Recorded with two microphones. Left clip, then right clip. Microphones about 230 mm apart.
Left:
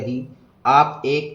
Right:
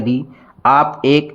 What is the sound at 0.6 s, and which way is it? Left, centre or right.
Speech, right.